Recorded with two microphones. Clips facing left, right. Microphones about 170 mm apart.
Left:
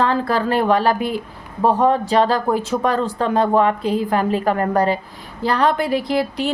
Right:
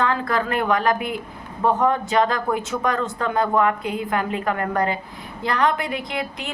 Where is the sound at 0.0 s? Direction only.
35° left (ahead or behind).